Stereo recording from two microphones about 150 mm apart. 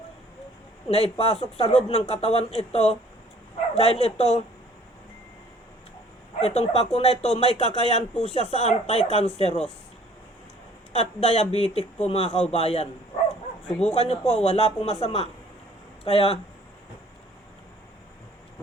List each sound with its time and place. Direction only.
0.9 s speech: 40° left (ahead or behind)
6.4 s speech: 45° left (ahead or behind)
10.9 s speech: 45° left (ahead or behind)